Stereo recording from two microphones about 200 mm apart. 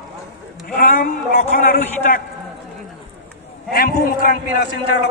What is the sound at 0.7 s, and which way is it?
A man's voice, 45° left (ahead or behind).